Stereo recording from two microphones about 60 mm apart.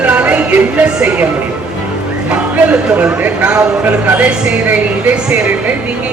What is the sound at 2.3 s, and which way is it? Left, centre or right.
A woman's voice, centre.